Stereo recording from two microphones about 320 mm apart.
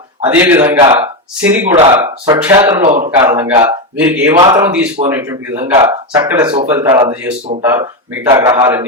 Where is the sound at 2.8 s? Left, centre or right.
Right.